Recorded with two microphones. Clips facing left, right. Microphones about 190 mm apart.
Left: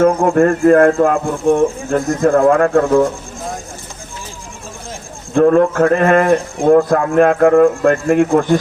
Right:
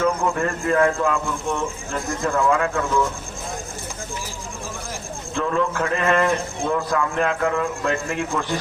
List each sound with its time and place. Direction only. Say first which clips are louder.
0.0 s a man's voice: left 10 dB; 50° left (ahead or behind)
5.3 s a man's voice: left 12 dB; 50° left (ahead or behind)